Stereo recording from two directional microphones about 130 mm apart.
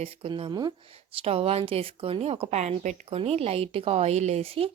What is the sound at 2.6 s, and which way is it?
Speech, 70° right (ahead or behind).